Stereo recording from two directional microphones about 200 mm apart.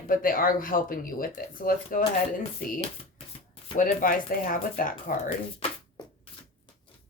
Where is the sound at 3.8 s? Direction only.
40° left (ahead or behind).